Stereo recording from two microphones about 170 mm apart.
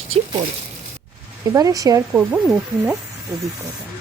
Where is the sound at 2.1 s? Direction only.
10° right (ahead or behind).